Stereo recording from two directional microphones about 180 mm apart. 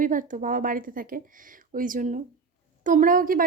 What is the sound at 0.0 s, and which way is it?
A woman's voice, 45° right (ahead or behind).